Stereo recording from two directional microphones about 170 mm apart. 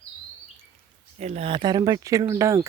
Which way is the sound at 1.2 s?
40° right (ahead or behind).